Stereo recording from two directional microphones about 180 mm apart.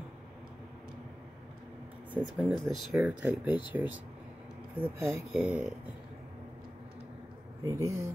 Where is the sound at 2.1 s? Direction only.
Centre (ahead or behind).